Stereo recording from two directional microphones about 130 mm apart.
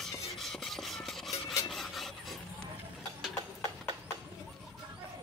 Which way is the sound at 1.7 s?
Centre (ahead or behind).